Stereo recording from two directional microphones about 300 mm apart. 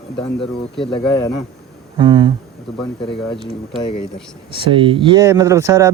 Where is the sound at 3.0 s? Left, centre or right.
Centre.